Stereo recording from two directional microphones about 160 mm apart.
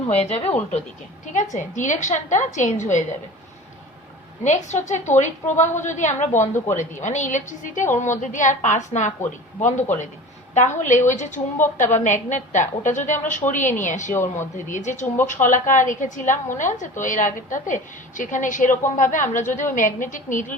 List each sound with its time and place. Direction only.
0.1 s a woman's voice: 40° left (ahead or behind)
4.4 s a woman's voice: 45° left (ahead or behind)
14.1 s speech: 15° left (ahead or behind)
14.5 s a woman's voice: 50° left (ahead or behind)